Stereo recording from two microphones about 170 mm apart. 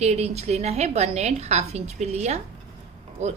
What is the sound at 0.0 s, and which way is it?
A woman's voice, 40° right (ahead or behind).